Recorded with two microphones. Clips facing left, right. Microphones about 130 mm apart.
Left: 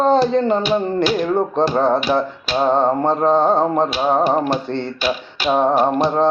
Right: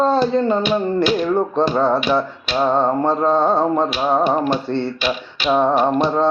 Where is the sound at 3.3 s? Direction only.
20° left (ahead or behind).